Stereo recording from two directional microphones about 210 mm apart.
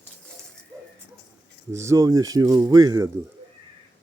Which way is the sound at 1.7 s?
15° right (ahead or behind).